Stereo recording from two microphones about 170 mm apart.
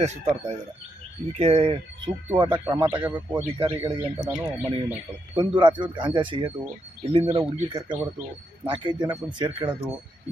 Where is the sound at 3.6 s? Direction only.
30° right (ahead or behind).